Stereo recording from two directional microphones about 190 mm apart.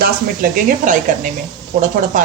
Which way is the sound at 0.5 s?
45° right (ahead or behind).